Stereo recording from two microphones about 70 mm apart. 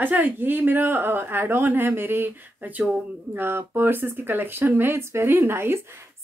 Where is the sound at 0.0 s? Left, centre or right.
Right.